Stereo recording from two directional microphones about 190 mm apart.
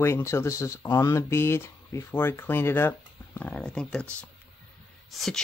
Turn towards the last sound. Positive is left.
turn(degrees=0)  # may be behind; listen again after turning